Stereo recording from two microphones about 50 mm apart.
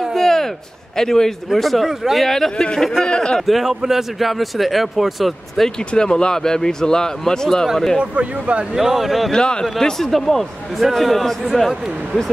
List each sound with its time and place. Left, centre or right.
0.0 s a sound: centre
0.9 s speech: centre
2.5 s a man's voice: centre
3.4 s speech: centre
5.9 s a man's voice: centre
8.0 s speech: right
8.7 s speech: centre
9.3 s a man's voice: centre